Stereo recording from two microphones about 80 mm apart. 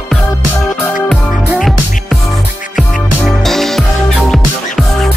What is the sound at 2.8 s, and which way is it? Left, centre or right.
Music, centre.